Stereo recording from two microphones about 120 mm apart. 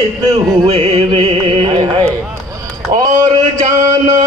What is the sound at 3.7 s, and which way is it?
Speech, 30° right (ahead or behind).